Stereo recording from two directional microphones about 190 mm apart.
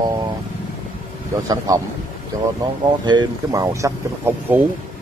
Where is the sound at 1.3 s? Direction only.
20° right (ahead or behind).